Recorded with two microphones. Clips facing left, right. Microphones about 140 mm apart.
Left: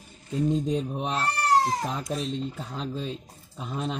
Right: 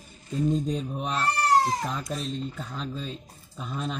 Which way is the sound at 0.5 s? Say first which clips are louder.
Left 1 dB; 20° left (ahead or behind).